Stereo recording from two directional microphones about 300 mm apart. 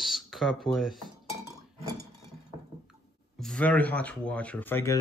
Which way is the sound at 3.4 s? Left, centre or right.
Centre.